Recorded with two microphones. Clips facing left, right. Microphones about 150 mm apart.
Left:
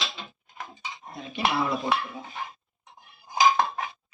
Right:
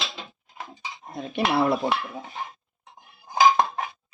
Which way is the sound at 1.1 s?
55° right (ahead or behind).